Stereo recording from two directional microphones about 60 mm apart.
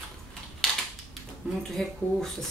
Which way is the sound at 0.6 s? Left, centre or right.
Centre.